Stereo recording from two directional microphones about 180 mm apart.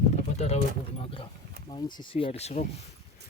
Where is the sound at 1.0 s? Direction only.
30° left (ahead or behind).